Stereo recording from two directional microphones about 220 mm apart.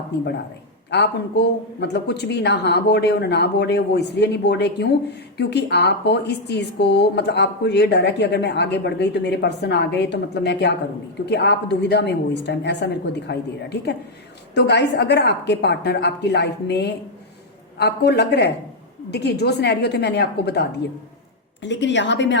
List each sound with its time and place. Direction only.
0.9 s a woman's voice: 50° left (ahead or behind)